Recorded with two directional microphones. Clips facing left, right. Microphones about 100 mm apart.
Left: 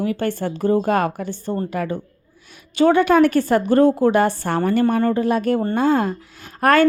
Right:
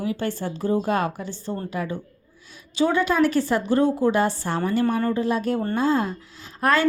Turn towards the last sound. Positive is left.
turn(degrees=60)  # may be behind; listen again after turning